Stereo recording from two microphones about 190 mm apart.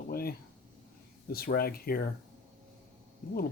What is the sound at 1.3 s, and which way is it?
Speech, 55° left (ahead or behind).